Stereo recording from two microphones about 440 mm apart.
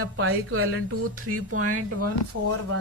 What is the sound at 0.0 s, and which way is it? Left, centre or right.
Speech, right.